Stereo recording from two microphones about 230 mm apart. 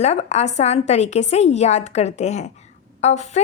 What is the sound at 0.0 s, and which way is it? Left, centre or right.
A woman's voice, left.